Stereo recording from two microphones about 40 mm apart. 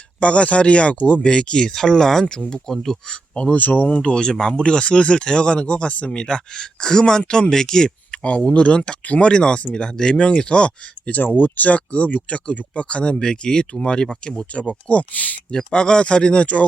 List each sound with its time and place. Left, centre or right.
0.2 s speech: left
1.2 s speech: left
1.7 s speech: centre
2.6 s speech: centre
3.5 s speech: left
3.8 s speech: left
6.1 s speech: centre
8.2 s speech: left
11.1 s speech: left
15.5 s speech: left